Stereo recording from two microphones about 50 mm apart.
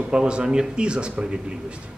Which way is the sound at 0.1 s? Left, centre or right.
Centre.